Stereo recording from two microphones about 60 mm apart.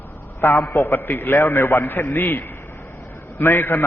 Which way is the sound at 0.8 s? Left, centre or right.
Left.